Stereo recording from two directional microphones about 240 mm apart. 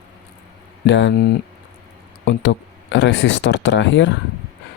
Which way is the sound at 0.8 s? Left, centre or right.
Left.